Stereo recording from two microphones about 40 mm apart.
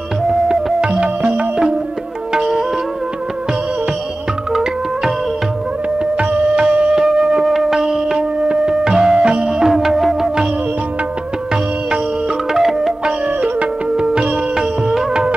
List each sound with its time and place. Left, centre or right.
0.7 s music: right
2.3 s music: centre
4.5 s music: centre
6.1 s music: right
7.1 s music: centre
10.2 s music: centre
12.5 s music: centre
13.0 s music: right
13.9 s music: centre